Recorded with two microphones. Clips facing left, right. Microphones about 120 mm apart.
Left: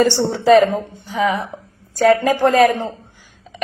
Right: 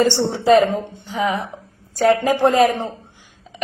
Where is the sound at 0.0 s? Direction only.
20° right (ahead or behind).